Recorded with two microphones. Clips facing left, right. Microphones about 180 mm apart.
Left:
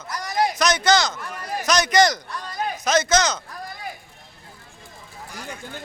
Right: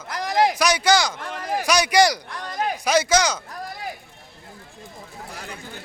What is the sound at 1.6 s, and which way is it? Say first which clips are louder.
Speech: even; 10° right (ahead or behind).